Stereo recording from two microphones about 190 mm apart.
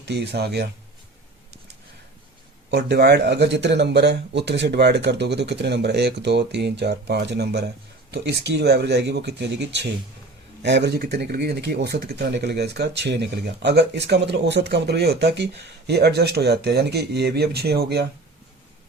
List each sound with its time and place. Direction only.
0.0 s speech: 60° right (ahead or behind)
2.6 s speech: 60° right (ahead or behind)